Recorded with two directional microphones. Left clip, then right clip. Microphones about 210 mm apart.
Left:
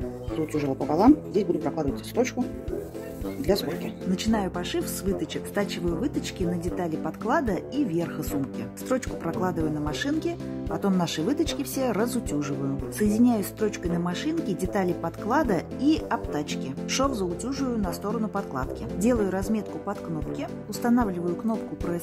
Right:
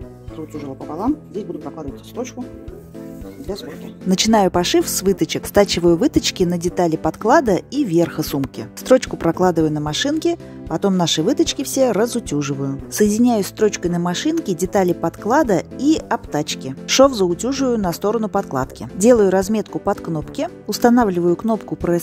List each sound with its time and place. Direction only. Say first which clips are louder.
0.9 s speech: left 3 dB; 10° left (ahead or behind)
4.1 s speech: right 14 dB; 45° right (ahead or behind)